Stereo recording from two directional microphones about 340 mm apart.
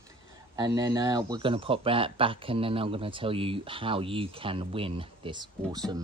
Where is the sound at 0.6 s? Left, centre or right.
Centre.